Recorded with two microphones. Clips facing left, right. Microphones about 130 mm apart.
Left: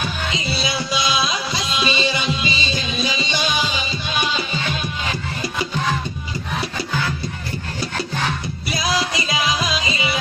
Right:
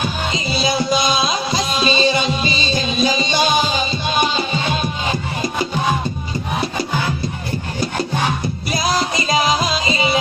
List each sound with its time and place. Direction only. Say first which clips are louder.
0.3 s music: right 6 dB; 40° right (ahead or behind)
5.7 s music: right 3 dB; 15° right (ahead or behind)
7.8 s music: right 4 dB; 15° right (ahead or behind)
8.9 s music: right 4 dB; 45° right (ahead or behind)